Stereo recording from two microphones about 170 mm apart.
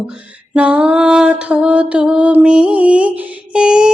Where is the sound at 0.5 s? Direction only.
5° right (ahead or behind).